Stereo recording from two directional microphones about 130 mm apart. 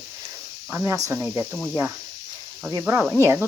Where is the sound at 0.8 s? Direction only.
25° right (ahead or behind).